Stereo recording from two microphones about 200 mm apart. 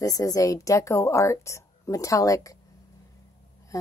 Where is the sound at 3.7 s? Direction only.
15° left (ahead or behind).